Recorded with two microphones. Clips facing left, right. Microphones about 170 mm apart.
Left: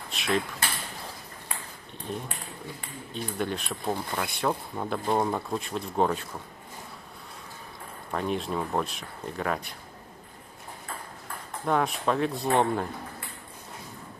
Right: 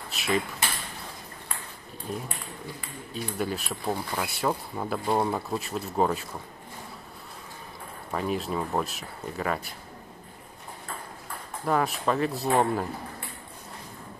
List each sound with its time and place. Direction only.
0.1 s a sound: 5° right (ahead or behind)
3.1 s speech: 5° right (ahead or behind)
8.1 s speech: 5° right (ahead or behind)
11.6 s speech: centre (ahead or behind)